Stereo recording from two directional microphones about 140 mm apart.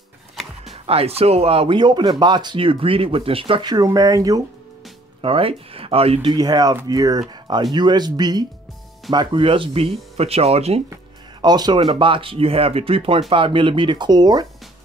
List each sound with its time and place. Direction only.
0.8 s speech: 45° right (ahead or behind); by 4.4 s 25° right (ahead or behind)
5.2 s speech: 40° right (ahead or behind)
6.3 s speech: 30° right (ahead or behind); by 10.8 s 45° right (ahead or behind)
11.4 s speech: 30° right (ahead or behind)